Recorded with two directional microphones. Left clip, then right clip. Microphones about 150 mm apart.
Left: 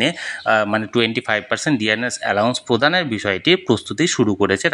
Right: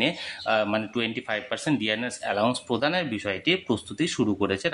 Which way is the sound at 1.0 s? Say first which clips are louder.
Left 10 dB; 50° left (ahead or behind).